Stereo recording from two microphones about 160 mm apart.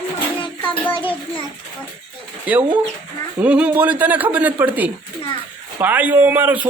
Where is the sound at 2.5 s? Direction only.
10° right (ahead or behind).